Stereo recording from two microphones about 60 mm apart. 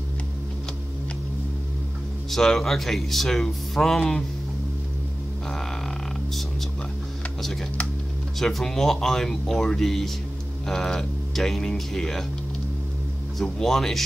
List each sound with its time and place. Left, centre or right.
2.3 s speech: centre
8.4 s speech: centre
13.4 s speech: centre